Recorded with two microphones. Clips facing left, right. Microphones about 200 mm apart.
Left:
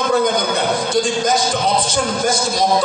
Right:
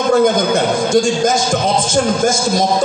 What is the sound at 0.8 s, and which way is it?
A man's voice, 45° right (ahead or behind).